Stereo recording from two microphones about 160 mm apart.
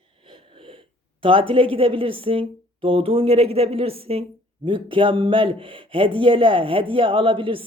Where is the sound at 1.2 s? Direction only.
35° right (ahead or behind).